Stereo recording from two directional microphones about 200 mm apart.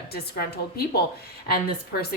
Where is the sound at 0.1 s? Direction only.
50° left (ahead or behind).